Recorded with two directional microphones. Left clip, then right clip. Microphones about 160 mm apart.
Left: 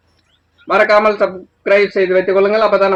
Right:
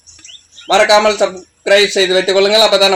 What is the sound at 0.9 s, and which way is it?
Speech, 20° right (ahead or behind).